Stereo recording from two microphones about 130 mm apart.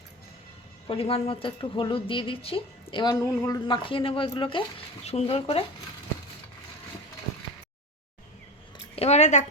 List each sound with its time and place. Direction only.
0.9 s speech: 45° left (ahead or behind)
3.0 s speech: 30° left (ahead or behind)
5.0 s speech: 55° left (ahead or behind)
9.0 s speech: 60° left (ahead or behind)